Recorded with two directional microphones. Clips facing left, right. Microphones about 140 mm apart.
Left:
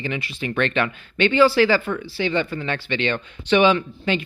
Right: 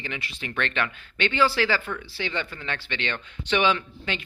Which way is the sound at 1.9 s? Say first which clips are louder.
Left 7 dB; 40° left (ahead or behind).